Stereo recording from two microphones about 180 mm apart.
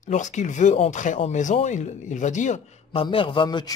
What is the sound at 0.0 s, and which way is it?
Speech, 45° left (ahead or behind).